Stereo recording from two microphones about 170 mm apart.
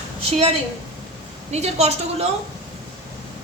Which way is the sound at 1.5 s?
40° right (ahead or behind).